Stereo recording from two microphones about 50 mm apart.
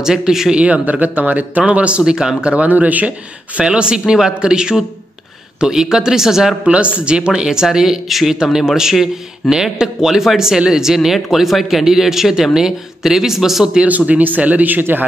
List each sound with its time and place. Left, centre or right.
0.0 s speech: centre
0.6 s speech: right
2.5 s speech: right
3.5 s speech: right
6.6 s speech: right; by 13.7 s centre
13.8 s speech: right